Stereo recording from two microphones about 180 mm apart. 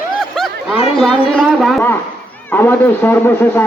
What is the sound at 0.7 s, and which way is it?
Speech, 35° left (ahead or behind).